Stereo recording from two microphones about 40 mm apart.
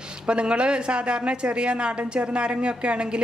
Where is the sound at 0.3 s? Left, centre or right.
Right.